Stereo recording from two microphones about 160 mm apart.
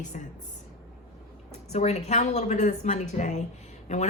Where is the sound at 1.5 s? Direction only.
45° left (ahead or behind).